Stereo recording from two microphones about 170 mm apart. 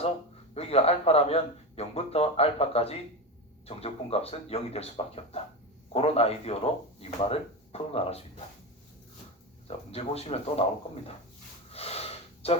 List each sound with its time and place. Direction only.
0.5 s speech: 35° left (ahead or behind)
9.6 s speech: 35° left (ahead or behind)
11.7 s gasp: 35° left (ahead or behind)